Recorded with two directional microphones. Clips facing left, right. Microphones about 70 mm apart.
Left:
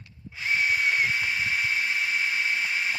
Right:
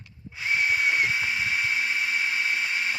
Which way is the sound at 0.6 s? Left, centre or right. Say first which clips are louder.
Right 1 dB; centre.